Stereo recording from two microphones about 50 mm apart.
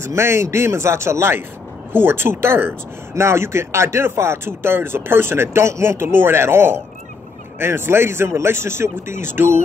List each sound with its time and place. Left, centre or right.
0.0 s speech: right
1.9 s speech: right
3.2 s speech: right